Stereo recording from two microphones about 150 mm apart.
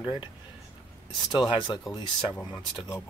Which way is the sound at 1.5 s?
30° left (ahead or behind).